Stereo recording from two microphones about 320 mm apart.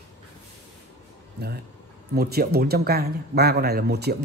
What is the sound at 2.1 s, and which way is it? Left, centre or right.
Speech, right.